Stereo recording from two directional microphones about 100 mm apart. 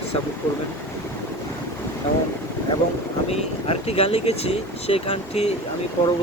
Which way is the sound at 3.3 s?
80° left.